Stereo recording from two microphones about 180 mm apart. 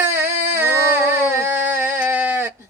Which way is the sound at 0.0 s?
10° right (ahead or behind).